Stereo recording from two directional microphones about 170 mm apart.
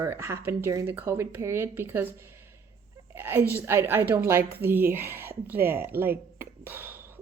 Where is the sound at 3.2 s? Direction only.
15° right (ahead or behind).